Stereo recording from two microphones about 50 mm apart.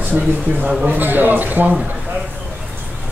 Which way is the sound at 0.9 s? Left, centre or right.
Right.